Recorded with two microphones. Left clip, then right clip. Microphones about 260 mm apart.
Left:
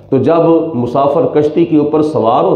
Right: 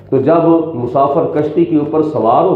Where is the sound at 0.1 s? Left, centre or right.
Left.